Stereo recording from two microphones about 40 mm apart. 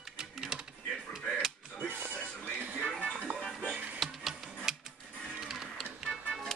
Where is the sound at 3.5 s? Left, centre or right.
Centre.